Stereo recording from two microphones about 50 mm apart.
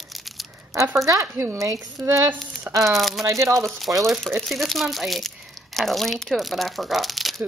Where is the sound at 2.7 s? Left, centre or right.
Right.